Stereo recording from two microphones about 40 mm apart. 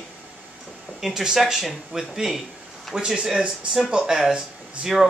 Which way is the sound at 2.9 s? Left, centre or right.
Right.